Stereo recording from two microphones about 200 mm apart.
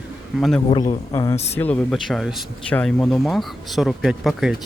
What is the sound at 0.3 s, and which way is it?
Speech, centre (ahead or behind).